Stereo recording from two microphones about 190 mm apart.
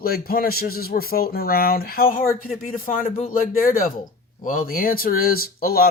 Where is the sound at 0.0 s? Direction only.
50° left (ahead or behind).